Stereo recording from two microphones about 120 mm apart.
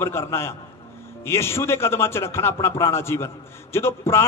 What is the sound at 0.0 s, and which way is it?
A man's voice, 20° left (ahead or behind).